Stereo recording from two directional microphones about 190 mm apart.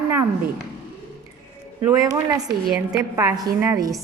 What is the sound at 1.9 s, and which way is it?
Speech, 20° right (ahead or behind).